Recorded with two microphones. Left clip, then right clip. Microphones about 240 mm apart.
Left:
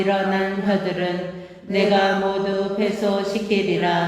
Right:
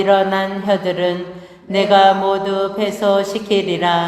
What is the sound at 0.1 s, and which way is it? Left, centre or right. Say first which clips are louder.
Chant: right 6 dB; right.